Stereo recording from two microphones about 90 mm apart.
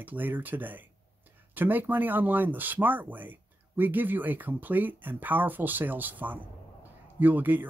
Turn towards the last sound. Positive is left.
turn(degrees=-20)  # may be behind; listen again after turning